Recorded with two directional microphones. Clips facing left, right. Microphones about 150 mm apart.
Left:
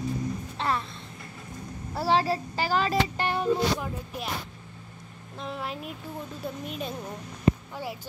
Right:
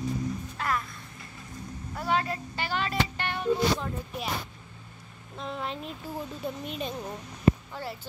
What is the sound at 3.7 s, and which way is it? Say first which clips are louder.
Speech: even; 5° left (ahead or behind).